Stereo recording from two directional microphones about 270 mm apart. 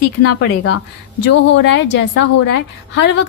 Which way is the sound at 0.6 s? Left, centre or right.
Left.